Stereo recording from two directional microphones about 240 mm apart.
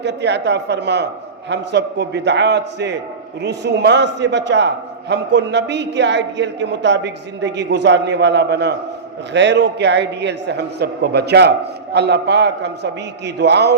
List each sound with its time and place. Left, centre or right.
0.0 s a man's voice: right